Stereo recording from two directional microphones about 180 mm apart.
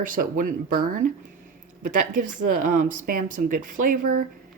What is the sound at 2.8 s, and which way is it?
Speech, 50° right (ahead or behind).